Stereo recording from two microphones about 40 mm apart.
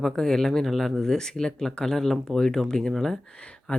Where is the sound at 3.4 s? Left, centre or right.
Left.